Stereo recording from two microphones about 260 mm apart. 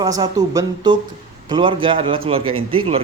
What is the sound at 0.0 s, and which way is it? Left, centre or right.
Speech, centre.